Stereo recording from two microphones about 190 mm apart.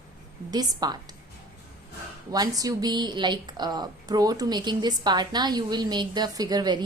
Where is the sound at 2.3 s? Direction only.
20° right (ahead or behind).